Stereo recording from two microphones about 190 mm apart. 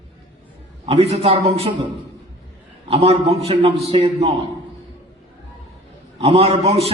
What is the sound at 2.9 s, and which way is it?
A man's voice, 30° right (ahead or behind).